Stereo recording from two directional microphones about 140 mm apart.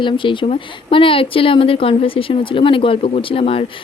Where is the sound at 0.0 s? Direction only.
35° left (ahead or behind).